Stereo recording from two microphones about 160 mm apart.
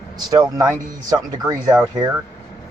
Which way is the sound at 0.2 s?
25° right (ahead or behind).